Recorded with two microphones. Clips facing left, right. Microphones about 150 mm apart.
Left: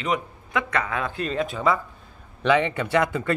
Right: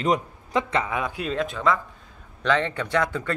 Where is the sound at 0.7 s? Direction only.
15° right (ahead or behind).